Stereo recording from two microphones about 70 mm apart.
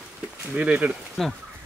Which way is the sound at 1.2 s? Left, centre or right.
Centre.